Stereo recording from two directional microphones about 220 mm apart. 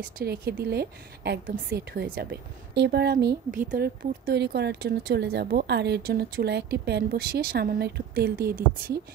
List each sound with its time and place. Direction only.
0.0 s speech: 45° right (ahead or behind)